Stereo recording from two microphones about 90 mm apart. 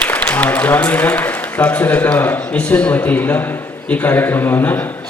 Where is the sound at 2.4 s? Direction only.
15° left (ahead or behind).